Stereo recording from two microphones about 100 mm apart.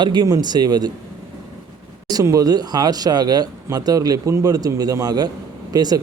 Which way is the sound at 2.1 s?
35° right (ahead or behind).